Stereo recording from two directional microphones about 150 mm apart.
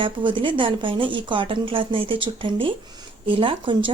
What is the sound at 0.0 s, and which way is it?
Speech, 35° right (ahead or behind).